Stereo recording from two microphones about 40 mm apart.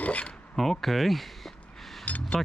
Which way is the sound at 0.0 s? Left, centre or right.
Left.